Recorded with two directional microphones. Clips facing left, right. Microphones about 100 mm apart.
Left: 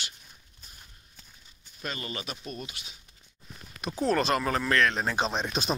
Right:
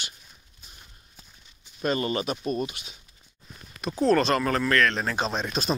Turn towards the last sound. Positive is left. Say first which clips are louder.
# right 2 dB
turn(degrees=15)  # may be behind; listen again after turning